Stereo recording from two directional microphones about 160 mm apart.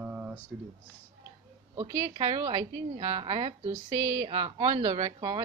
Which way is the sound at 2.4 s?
20° right (ahead or behind).